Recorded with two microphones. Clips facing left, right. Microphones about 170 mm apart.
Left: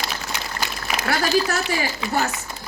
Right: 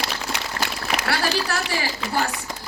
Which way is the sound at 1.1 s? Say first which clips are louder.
Left 5 dB; 45° left (ahead or behind).